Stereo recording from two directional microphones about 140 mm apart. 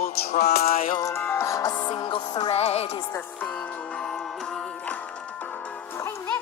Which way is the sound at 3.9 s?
5° left (ahead or behind).